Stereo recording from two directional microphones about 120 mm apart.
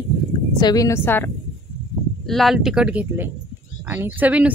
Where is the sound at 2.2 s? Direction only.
Centre (ahead or behind).